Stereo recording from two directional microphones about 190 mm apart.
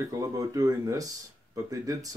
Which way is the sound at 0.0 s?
15° right (ahead or behind).